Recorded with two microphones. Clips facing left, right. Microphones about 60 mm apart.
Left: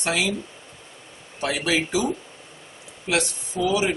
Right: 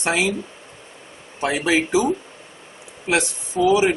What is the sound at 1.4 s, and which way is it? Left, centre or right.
Speech, right.